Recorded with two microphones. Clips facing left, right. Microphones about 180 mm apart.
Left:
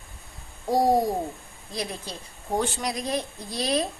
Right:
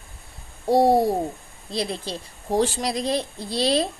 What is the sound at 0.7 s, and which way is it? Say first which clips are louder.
A woman's voice: right 4 dB; 30° right (ahead or behind).